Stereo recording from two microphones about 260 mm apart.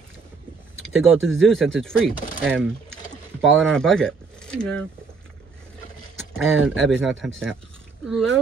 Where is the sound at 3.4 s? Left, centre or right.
Centre.